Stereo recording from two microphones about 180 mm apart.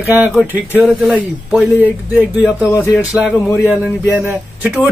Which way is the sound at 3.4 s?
10° left (ahead or behind).